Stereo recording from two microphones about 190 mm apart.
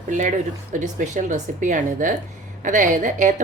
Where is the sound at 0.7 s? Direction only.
40° right (ahead or behind).